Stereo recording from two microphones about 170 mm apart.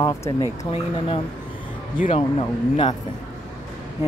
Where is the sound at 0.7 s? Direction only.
30° left (ahead or behind).